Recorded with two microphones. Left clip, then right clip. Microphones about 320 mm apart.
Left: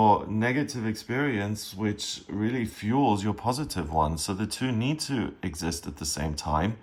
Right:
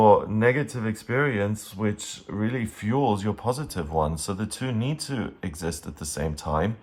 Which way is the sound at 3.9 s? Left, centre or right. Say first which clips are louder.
Even; left.